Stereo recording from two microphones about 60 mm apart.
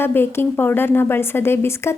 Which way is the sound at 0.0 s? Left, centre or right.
Left.